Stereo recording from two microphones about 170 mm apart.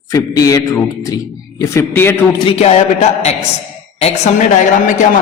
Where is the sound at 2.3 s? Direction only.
35° left (ahead or behind).